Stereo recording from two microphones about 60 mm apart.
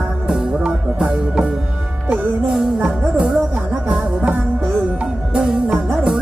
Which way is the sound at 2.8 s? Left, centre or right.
Centre.